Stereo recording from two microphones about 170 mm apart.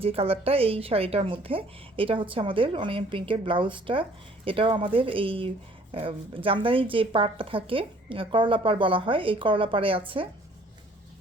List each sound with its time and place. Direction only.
0.0 s a woman's voice: 35° right (ahead or behind)